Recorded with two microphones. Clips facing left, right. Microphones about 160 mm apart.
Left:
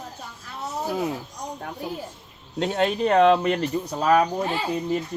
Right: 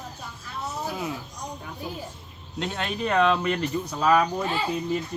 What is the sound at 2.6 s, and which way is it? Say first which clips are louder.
Speech: left 7 dB; 40° left (ahead or behind).